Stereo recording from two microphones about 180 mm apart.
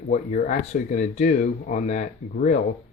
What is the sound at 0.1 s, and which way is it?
Speech, 45° left (ahead or behind).